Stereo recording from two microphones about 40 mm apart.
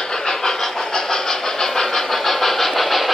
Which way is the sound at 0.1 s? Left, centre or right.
Centre.